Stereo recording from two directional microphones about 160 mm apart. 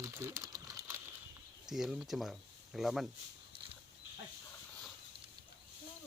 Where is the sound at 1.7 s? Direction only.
5° right (ahead or behind).